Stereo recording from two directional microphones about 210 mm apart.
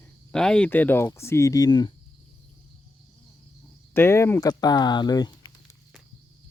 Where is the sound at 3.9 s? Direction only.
10° left (ahead or behind).